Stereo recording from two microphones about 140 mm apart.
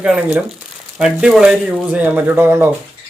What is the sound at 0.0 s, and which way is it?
Speech, 5° right (ahead or behind).